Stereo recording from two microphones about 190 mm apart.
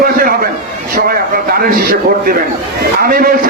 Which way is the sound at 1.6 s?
50° right (ahead or behind).